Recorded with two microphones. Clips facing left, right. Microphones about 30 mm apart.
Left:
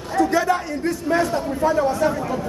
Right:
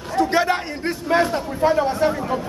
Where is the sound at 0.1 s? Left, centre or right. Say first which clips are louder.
Even; right.